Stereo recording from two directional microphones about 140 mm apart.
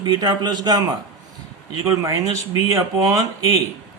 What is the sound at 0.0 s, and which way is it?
Speech, 30° right (ahead or behind).